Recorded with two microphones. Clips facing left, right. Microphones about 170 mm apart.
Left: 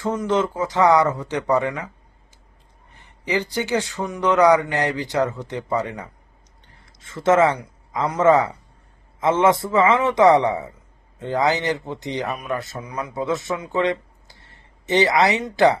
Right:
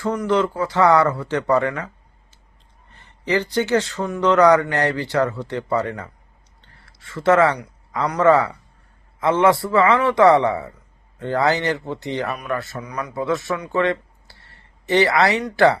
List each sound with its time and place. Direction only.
0.0 s a man's voice: 20° left (ahead or behind)
2.9 s a man's voice: 15° left (ahead or behind)